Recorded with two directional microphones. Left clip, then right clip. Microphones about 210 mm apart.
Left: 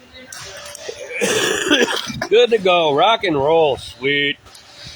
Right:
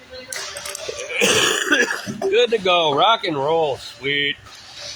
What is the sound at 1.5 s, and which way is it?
Speech, 40° left (ahead or behind).